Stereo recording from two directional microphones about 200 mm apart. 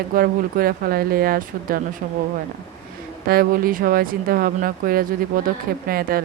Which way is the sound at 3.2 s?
45° right (ahead or behind).